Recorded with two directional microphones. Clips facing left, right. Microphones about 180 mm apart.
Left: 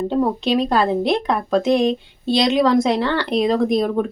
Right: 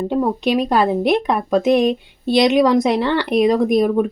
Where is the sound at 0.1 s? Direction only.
15° right (ahead or behind).